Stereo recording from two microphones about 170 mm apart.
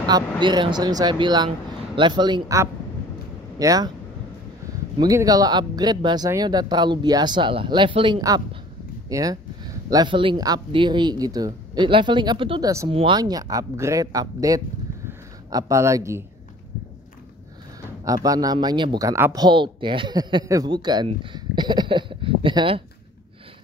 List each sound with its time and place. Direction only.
0.0 s speech: 25° right (ahead or behind)
4.9 s speech: 20° right (ahead or behind)
18.0 s speech: 20° right (ahead or behind)